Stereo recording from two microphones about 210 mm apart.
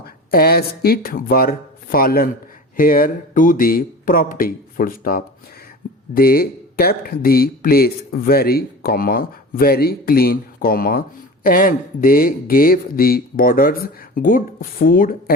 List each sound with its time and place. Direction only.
0.0 s speech: 45° left (ahead or behind)